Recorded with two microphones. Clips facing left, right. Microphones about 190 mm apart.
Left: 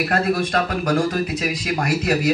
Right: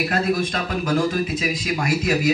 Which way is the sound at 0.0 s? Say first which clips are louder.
Left 1 dB; 55° left (ahead or behind).